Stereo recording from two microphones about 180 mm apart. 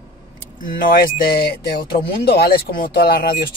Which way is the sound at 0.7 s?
55° left (ahead or behind).